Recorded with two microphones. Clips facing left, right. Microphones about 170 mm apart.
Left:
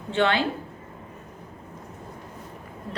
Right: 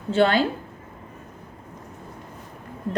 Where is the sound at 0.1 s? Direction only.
40° right (ahead or behind).